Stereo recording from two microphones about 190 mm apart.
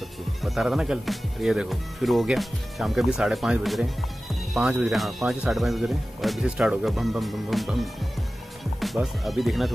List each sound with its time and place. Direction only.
0.4 s speech: centre (ahead or behind)